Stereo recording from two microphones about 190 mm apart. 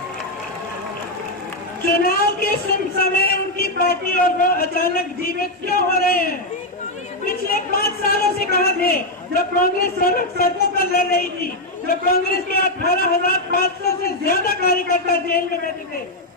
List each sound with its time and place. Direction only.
1.9 s a man's voice: 50° left (ahead or behind)